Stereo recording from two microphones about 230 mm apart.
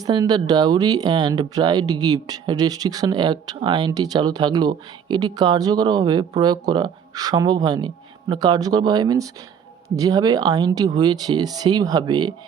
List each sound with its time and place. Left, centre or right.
0.0 s speech: centre